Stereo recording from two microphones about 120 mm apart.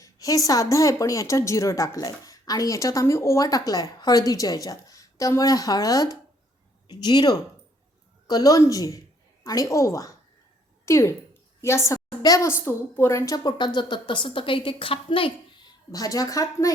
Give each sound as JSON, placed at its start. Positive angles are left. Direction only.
{"t": 0.0, "sound": "a woman's voice", "side_deg": 30}
{"t": 11.6, "sound": "a sound", "side_deg": 25}
{"t": 12.6, "sound": "a woman's voice", "side_deg": 20}